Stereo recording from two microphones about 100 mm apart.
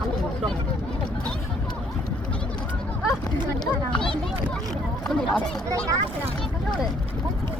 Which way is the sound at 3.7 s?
5° left (ahead or behind).